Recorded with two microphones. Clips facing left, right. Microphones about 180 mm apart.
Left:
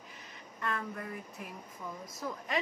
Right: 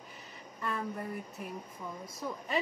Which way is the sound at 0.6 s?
10° right (ahead or behind).